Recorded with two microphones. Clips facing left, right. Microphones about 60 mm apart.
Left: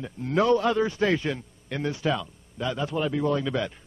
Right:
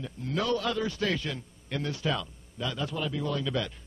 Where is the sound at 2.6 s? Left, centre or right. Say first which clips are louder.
Left 5 dB; centre.